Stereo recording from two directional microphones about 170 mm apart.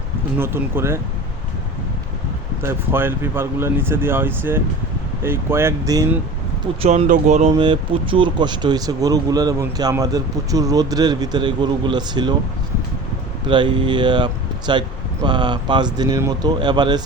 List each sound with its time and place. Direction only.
0.3 s speech: 15° right (ahead or behind)
2.6 s speech: 15° right (ahead or behind)
6.8 s speech: 40° right (ahead or behind)
7.5 s speech: 30° right (ahead or behind)
13.5 s speech: 30° right (ahead or behind)